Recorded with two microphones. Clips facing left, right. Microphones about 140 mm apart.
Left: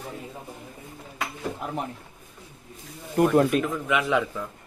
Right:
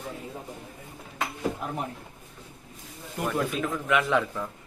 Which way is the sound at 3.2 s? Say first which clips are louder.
Left 9 dB; 50° left (ahead or behind).